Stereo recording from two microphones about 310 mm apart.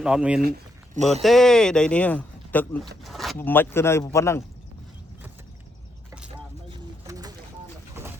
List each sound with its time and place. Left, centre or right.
0.0 s speech: centre
0.4 s a sound: right
1.2 s speech: centre
6.7 s bird: centre